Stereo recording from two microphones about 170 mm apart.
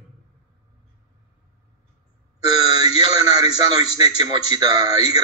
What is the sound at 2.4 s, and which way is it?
Speech, 25° right (ahead or behind).